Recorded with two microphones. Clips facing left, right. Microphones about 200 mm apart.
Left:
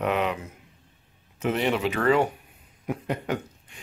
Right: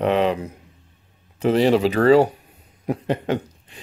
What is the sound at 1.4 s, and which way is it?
Speech, 35° right (ahead or behind).